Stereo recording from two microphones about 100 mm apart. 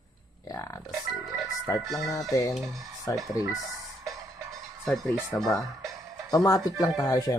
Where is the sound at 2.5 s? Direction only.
Centre (ahead or behind).